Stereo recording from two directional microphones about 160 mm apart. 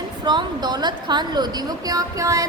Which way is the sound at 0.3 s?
25° right (ahead or behind).